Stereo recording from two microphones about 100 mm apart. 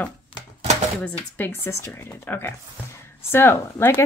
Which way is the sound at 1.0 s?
15° left (ahead or behind).